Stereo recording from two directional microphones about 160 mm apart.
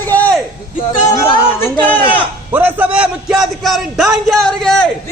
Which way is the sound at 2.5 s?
10° right (ahead or behind).